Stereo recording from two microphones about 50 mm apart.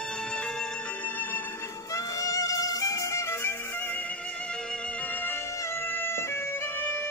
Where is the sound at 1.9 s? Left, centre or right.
Left.